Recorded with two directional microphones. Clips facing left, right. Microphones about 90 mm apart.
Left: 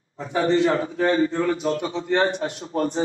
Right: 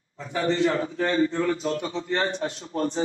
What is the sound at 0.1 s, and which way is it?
A man's voice, 25° left (ahead or behind).